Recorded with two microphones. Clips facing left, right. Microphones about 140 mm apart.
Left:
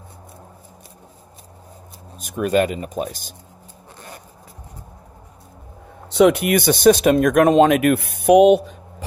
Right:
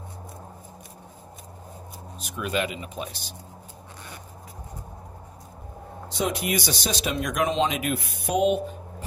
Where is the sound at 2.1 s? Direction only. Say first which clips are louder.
Left 10 dB; 45° left (ahead or behind).